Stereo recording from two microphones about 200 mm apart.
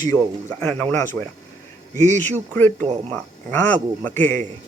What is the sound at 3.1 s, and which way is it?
Speech, 10° left (ahead or behind).